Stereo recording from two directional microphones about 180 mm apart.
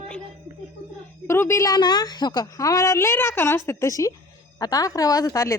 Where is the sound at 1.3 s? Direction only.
15° left (ahead or behind).